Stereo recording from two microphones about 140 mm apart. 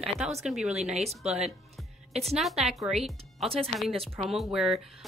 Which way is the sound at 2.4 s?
Centre (ahead or behind).